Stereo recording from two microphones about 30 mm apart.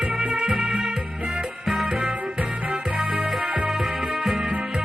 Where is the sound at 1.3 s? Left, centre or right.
Right.